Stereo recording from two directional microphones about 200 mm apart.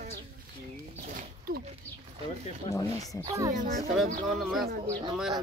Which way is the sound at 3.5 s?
40° right (ahead or behind).